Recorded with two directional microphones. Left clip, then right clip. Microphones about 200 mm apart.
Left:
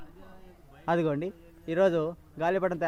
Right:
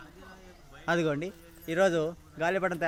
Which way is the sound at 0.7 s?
35° left (ahead or behind).